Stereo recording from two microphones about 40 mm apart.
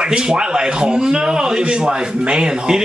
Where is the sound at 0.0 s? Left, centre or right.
Centre.